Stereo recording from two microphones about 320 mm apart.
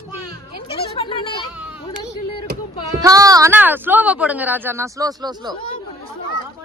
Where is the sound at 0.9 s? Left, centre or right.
Centre.